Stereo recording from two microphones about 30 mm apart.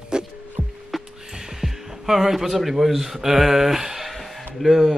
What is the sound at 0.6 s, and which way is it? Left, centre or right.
Music, right.